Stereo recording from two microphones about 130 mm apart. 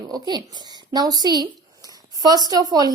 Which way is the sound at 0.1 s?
35° right (ahead or behind).